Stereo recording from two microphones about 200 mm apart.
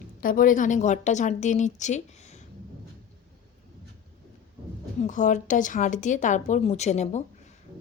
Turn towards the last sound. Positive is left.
turn(degrees=35)  # may be behind; listen again after turning